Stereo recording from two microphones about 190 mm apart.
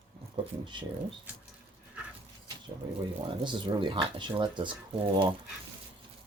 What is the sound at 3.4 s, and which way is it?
Speech, 25° right (ahead or behind).